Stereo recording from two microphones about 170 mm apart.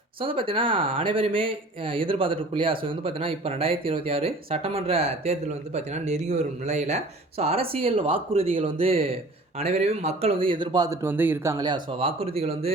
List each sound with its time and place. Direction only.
0.2 s speech: 30° right (ahead or behind); by 11.5 s 10° right (ahead or behind)
11.5 s speech: 25° right (ahead or behind)